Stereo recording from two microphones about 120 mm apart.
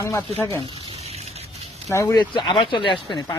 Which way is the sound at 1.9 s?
25° left (ahead or behind).